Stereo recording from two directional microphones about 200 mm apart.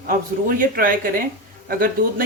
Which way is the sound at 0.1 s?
45° right (ahead or behind).